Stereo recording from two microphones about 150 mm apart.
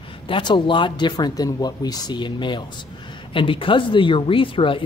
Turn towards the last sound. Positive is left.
turn(degrees=35)  # may be behind; listen again after turning